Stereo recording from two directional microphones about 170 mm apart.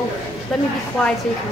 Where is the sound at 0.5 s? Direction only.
Centre (ahead or behind).